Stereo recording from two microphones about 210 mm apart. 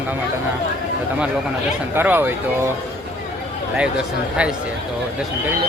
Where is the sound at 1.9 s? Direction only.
10° right (ahead or behind).